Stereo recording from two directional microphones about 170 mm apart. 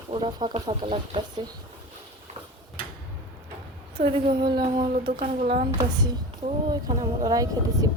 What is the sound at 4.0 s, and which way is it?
Speech, 35° right (ahead or behind).